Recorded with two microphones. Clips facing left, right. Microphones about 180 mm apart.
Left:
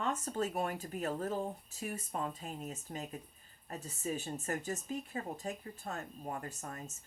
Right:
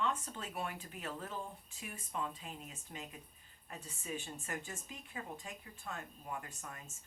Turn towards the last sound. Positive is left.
turn(degrees=40)  # may be behind; listen again after turning